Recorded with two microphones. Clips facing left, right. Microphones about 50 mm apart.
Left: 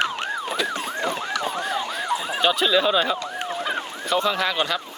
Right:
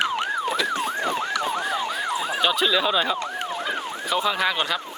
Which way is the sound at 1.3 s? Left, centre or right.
Centre.